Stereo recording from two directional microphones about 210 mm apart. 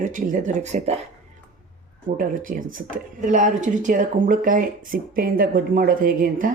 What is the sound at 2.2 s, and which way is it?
Speech, 40° right (ahead or behind).